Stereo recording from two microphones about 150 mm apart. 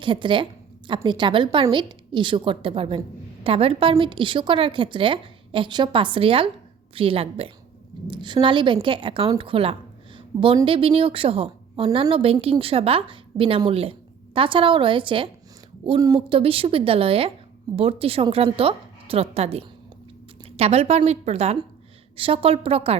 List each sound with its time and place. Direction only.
0.0 s a woman's voice: 35° right (ahead or behind)
10.2 s a sound: 35° right (ahead or behind)
10.7 s a woman's voice: 40° right (ahead or behind)